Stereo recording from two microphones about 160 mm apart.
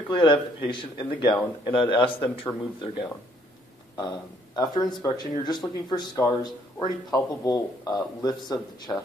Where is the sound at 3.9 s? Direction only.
25° left (ahead or behind).